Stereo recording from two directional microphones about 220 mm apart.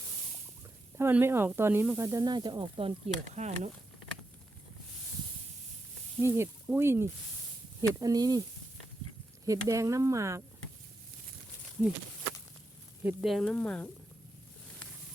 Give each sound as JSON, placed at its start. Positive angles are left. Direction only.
{"t": 0.9, "sound": "speech", "side_deg": -10}
{"t": 6.2, "sound": "speech", "side_deg": -10}
{"t": 9.5, "sound": "speech", "side_deg": -15}
{"t": 13.1, "sound": "speech", "side_deg": 0}